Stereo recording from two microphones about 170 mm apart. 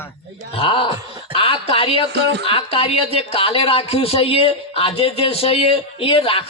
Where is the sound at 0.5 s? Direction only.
30° left (ahead or behind).